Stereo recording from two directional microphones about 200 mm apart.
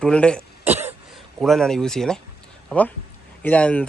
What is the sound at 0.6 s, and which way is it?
Cough, 10° right (ahead or behind).